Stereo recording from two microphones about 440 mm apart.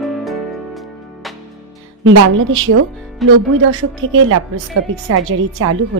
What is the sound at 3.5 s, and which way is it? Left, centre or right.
Speech, right.